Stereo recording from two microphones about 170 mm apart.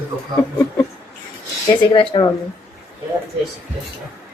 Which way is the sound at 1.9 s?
30° left (ahead or behind).